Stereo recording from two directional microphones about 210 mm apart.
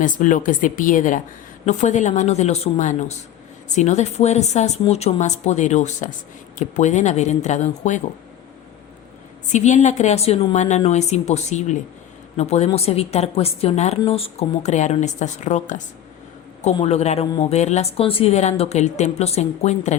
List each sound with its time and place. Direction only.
0.0 s a woman's voice: 40° left (ahead or behind)
9.5 s a woman's voice: 35° left (ahead or behind)